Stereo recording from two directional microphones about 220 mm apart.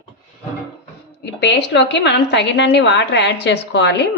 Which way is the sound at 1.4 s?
50° left (ahead or behind).